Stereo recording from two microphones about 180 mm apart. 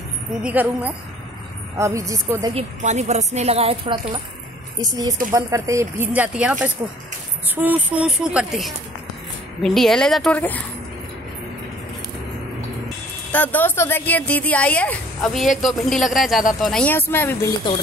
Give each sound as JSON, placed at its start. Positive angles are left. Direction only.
{"t": 0.4, "sound": "speech", "side_deg": -10}
{"t": 2.5, "sound": "speech", "side_deg": -40}
{"t": 13.3, "sound": "speech", "side_deg": 10}